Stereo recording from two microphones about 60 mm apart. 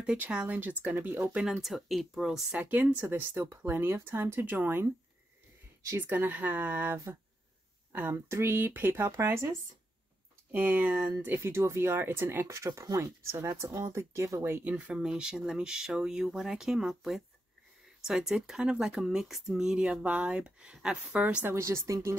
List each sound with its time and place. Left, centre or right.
0.0 s speech: centre
0.9 s speech: right
1.9 s speech: centre
2.6 s speech: right
5.9 s speech: right
8.1 s speech: right
10.5 s speech: right
11.3 s speech: right
12.4 s speech: right
14.6 s speech: right
21.5 s speech: right